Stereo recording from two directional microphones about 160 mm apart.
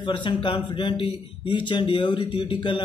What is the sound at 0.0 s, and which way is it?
Speech, 30° left (ahead or behind).